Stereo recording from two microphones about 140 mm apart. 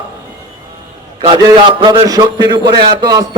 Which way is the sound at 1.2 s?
35° right (ahead or behind).